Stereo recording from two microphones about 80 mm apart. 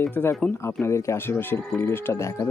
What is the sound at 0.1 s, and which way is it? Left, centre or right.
Speech, left.